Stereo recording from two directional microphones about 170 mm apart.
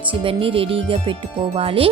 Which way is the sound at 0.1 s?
30° right (ahead or behind).